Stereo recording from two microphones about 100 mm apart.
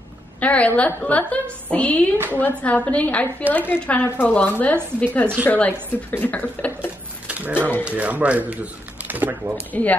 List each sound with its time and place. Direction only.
0.4 s a woman's voice: 15° left (ahead or behind)
7.2 s a sound: 15° right (ahead or behind)
7.8 s speech: 15° right (ahead or behind)
9.7 s a woman's voice: 15° left (ahead or behind)